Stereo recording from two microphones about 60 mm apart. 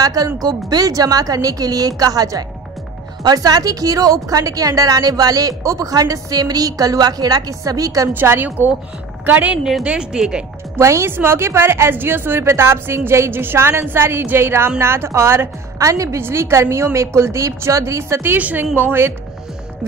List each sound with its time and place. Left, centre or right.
0.0 s a woman's voice: right
8.1 s a woman's voice: right
9.6 s a woman's voice: centre
9.8 s speech: centre
10.8 s a woman's voice: right
11.1 s a woman's voice: right
15.8 s a woman's voice: right
16.2 s a woman's voice: right
18.3 s speech: right